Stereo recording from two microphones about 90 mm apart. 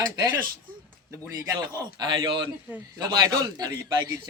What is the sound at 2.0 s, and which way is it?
Speech, 60° right (ahead or behind).